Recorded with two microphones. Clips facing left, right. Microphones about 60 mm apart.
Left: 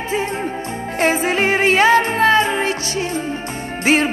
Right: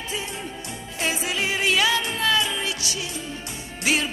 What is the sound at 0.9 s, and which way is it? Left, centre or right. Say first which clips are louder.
Music: left 10 dB; left.